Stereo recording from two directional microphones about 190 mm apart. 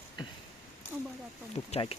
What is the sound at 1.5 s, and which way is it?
Speech, 35° left (ahead or behind).